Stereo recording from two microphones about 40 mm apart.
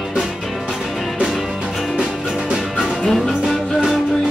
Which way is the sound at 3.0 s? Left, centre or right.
Centre.